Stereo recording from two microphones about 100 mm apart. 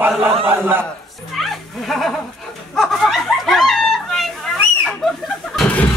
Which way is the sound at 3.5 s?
Centre (ahead or behind).